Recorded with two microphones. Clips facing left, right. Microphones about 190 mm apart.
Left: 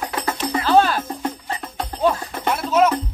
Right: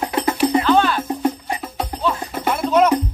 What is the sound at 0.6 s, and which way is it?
Music, 40° left (ahead or behind).